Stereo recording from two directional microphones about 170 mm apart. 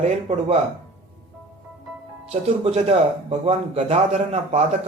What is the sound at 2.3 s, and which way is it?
Speech, 40° right (ahead or behind).